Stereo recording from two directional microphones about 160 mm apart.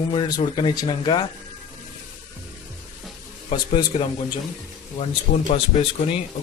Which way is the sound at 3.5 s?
30° left (ahead or behind).